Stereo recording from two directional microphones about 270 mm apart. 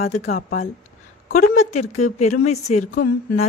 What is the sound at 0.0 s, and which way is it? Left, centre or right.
A woman's voice, left.